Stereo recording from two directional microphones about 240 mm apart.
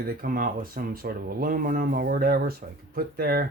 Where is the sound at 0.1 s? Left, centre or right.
Right.